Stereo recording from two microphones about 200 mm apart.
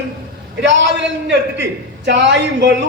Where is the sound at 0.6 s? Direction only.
65° right (ahead or behind).